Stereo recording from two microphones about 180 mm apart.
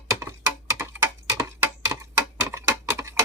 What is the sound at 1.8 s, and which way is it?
Typewriter, 15° right (ahead or behind).